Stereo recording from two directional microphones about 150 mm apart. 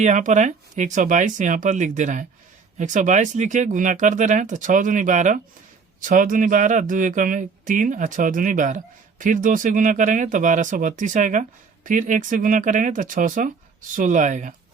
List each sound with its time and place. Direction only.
0.0 s speech: 55° right (ahead or behind)